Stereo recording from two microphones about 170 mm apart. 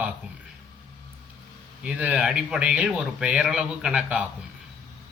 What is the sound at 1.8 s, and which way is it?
A man's voice, 5° right (ahead or behind).